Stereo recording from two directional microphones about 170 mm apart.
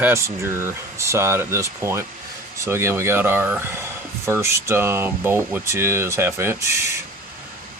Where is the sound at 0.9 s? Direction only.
15° right (ahead or behind).